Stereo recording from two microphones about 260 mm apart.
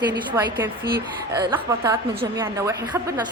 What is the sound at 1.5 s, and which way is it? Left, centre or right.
Speech, centre.